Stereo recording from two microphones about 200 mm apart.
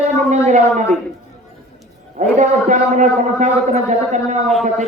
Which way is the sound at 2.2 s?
35° right (ahead or behind).